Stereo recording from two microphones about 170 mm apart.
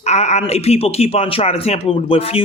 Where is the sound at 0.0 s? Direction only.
40° left (ahead or behind).